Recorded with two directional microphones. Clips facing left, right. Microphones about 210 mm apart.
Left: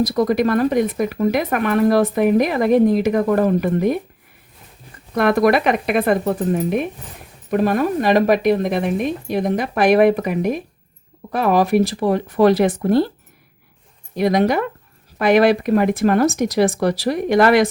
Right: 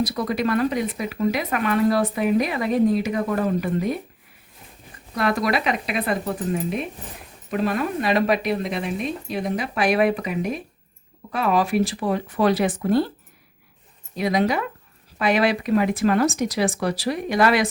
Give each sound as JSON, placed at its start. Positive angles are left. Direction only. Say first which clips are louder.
{"t": 0.1, "sound": "speech", "louder": "left 6 dB", "side_deg": 45}
{"t": 5.1, "sound": "speech", "louder": "left 7 dB", "side_deg": 55}
{"t": 14.2, "sound": "speech", "louder": "left 5 dB", "side_deg": 45}